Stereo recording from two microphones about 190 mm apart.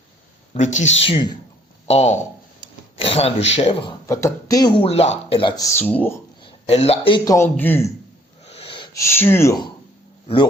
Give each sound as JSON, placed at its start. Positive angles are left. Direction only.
{"t": 0.5, "sound": "speech", "side_deg": 40}
{"t": 0.9, "sound": "speech", "side_deg": 30}
{"t": 4.0, "sound": "speech", "side_deg": 15}
{"t": 6.4, "sound": "speech", "side_deg": 30}
{"t": 7.3, "sound": "speech", "side_deg": 10}
{"t": 8.4, "sound": "wheeze", "side_deg": 30}
{"t": 9.0, "sound": "speech", "side_deg": 10}